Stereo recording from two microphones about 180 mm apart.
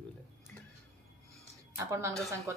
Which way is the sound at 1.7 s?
15° right (ahead or behind).